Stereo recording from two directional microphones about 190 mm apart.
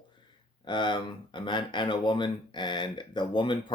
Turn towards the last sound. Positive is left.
turn(degrees=25)  # may be behind; listen again after turning